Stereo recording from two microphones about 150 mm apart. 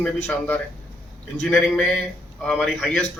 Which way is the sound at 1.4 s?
5° left (ahead or behind).